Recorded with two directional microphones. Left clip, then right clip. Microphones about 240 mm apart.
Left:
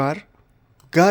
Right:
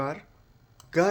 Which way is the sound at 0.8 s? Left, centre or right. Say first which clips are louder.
Left 8 dB; left.